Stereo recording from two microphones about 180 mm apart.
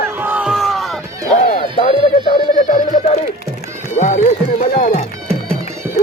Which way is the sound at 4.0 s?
40° left (ahead or behind).